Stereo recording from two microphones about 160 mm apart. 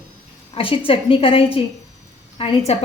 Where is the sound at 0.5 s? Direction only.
35° left (ahead or behind).